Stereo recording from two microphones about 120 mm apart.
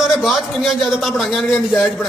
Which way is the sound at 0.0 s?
Centre (ahead or behind).